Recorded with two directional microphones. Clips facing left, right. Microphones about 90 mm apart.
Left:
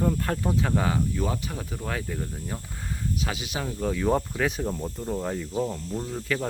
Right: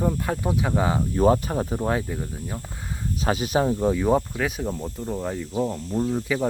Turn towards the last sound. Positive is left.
turn(degrees=-10)  # may be behind; listen again after turning